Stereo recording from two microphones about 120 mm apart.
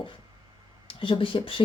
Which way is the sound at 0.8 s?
45° left (ahead or behind).